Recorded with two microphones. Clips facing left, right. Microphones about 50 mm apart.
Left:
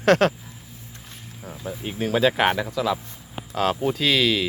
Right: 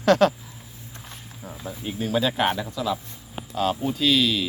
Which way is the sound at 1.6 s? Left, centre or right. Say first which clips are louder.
Left 1 dB; left.